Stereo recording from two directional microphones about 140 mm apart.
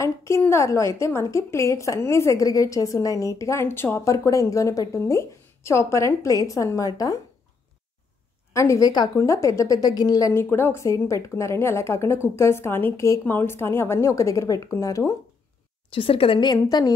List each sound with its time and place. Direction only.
0.0 s a woman's voice: 20° left (ahead or behind)
8.5 s a woman's voice: 25° left (ahead or behind)
15.9 s a woman's voice: 40° left (ahead or behind)